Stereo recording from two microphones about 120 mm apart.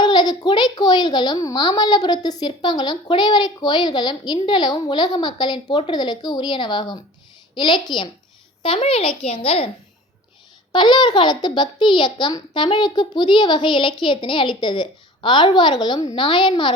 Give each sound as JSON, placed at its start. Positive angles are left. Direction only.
{"t": 0.0, "sound": "a woman's voice", "side_deg": 35}
{"t": 10.7, "sound": "a woman's voice", "side_deg": 40}